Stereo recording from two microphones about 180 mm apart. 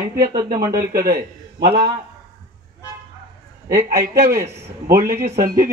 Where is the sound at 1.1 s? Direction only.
60° right (ahead or behind).